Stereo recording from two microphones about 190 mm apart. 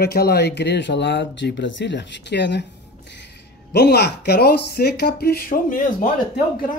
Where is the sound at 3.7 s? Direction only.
60° left (ahead or behind).